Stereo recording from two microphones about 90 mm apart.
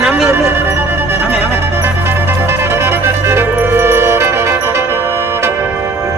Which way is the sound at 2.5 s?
30° right (ahead or behind).